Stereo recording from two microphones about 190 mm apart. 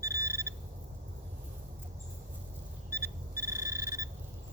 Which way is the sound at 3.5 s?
15° right (ahead or behind).